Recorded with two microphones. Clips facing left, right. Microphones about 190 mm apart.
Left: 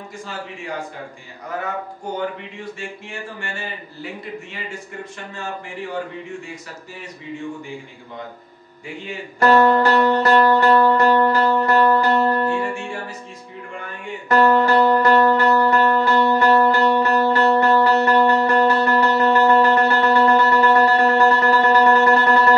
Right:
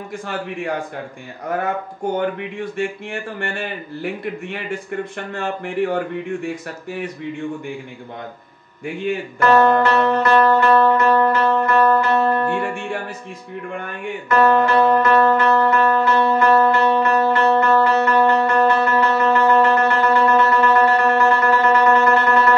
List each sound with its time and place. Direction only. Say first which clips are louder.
2.1 s speech: right 3 dB; 55° right (ahead or behind)
9.4 s music: even; 35° left (ahead or behind)
12.4 s music: right 1 dB; 55° right (ahead or behind)
14.3 s music: even; 35° left (ahead or behind)